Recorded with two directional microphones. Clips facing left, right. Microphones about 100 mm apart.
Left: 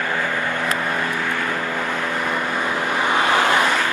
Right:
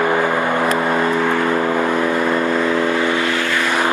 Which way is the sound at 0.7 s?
45° right (ahead or behind).